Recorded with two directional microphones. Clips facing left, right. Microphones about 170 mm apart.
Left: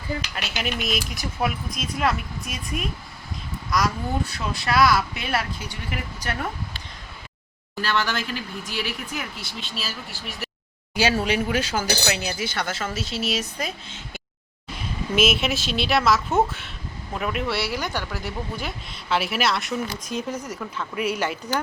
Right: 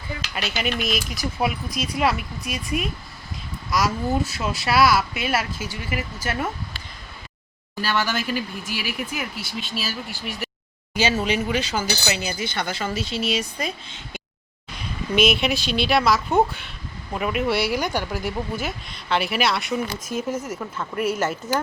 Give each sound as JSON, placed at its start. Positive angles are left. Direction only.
{"t": 0.8, "sound": "speech", "side_deg": 0}
{"t": 7.8, "sound": "speech", "side_deg": -10}
{"t": 10.9, "sound": "chink", "side_deg": 10}
{"t": 12.0, "sound": "speech", "side_deg": 5}